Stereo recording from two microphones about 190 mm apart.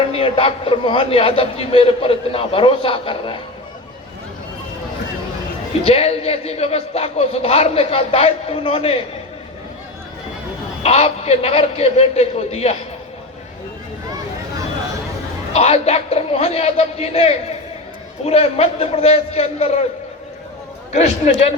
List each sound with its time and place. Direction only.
0.1 s a man's voice: 30° left (ahead or behind)
5.8 s a man's voice: 30° left (ahead or behind)
10.8 s a man's voice: 35° left (ahead or behind)
15.5 s a man's voice: 30° left (ahead or behind)
20.9 s a man's voice: 35° left (ahead or behind)